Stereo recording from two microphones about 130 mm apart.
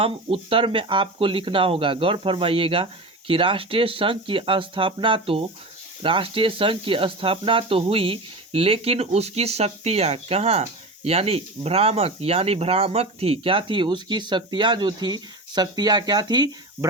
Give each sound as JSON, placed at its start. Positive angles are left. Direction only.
{"t": 0.0, "sound": "speech", "side_deg": -45}